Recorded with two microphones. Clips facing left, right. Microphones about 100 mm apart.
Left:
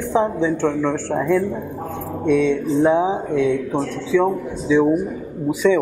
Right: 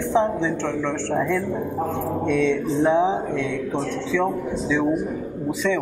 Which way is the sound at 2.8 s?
5° left (ahead or behind).